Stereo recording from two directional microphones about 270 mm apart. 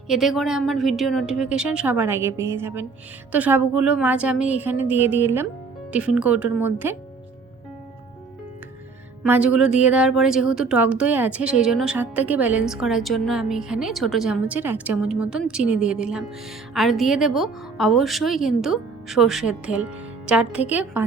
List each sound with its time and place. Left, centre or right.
0.1 s a woman's voice: centre
9.2 s speech: centre